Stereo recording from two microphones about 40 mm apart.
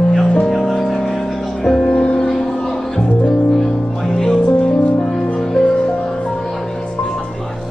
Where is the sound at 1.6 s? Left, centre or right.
Centre.